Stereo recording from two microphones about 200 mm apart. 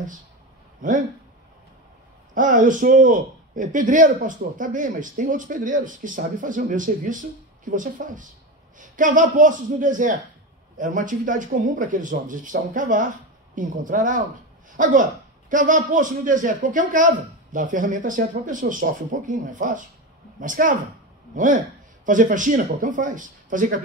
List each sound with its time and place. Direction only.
0.8 s a man's voice: 40° right (ahead or behind)
2.3 s a man's voice: 40° right (ahead or behind)